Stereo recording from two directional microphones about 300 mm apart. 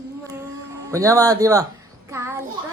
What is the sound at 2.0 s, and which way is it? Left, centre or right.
Child singing, centre.